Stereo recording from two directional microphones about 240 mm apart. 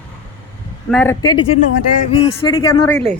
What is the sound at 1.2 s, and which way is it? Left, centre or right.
Speech, centre.